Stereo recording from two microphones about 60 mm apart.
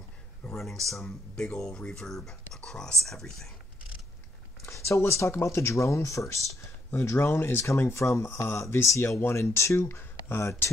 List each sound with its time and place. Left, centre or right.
0.6 s speech: centre
4.6 s speech: left
6.9 s speech: left